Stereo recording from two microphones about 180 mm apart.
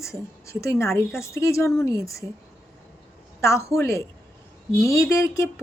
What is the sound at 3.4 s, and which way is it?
Speech, 15° left (ahead or behind).